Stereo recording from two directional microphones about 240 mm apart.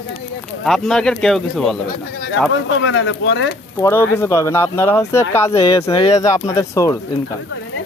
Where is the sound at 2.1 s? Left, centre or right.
Left.